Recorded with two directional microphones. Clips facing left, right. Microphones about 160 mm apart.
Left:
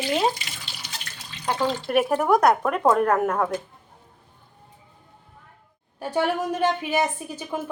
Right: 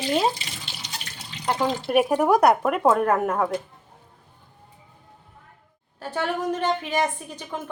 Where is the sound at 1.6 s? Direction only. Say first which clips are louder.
Right 1 dB; 15° right (ahead or behind).